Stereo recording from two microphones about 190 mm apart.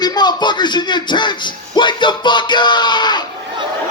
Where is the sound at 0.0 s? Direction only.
20° left (ahead or behind).